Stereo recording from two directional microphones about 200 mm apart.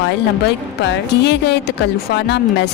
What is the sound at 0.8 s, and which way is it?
Speech, 55° left (ahead or behind).